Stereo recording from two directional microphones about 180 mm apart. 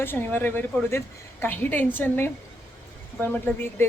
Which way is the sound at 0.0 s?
10° left (ahead or behind).